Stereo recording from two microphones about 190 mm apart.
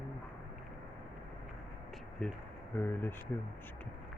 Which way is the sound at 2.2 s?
5° left (ahead or behind).